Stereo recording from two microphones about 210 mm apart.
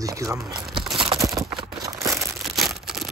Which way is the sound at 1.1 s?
15° right (ahead or behind).